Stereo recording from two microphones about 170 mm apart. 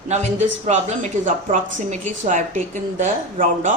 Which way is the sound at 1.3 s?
45° right (ahead or behind).